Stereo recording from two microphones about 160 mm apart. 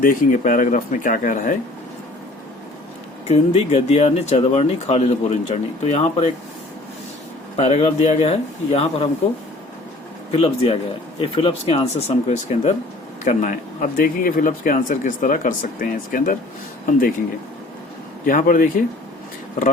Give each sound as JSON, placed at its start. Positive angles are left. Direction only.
{"t": 0.0, "sound": "speech", "side_deg": 60}
{"t": 3.2, "sound": "speech", "side_deg": 40}
{"t": 7.5, "sound": "speech", "side_deg": 40}
{"t": 10.3, "sound": "speech", "side_deg": 40}
{"t": 18.3, "sound": "speech", "side_deg": 60}